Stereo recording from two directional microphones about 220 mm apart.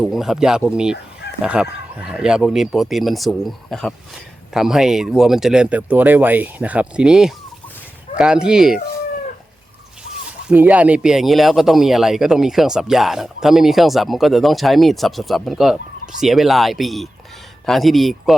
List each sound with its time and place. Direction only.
0.0 s speech: centre (ahead or behind)
10.2 s speech: 5° right (ahead or behind)